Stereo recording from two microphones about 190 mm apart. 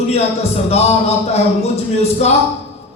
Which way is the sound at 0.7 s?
35° left (ahead or behind).